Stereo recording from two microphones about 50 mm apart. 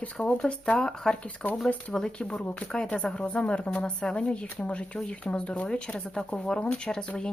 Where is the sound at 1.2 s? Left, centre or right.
Left.